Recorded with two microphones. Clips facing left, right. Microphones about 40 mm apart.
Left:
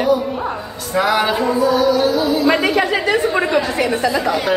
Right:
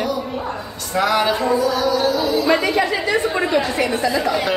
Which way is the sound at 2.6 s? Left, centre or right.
Left.